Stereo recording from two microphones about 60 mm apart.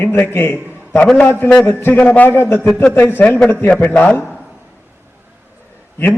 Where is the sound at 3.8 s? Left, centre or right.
Left.